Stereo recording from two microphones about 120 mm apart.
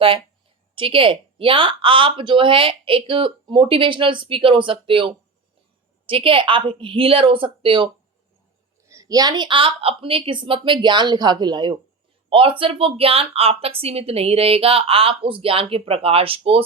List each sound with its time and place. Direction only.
0.8 s a woman's voice: 50° right (ahead or behind)
8.8 s a woman's voice: 25° right (ahead or behind)
12.3 s a woman's voice: 50° right (ahead or behind)